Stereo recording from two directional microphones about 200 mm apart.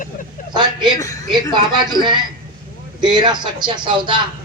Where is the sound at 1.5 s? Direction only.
20° right (ahead or behind).